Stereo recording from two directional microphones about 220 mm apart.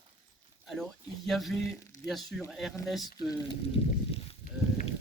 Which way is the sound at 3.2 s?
20° left (ahead or behind).